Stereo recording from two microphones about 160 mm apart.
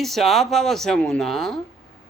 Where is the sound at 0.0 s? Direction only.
Centre (ahead or behind).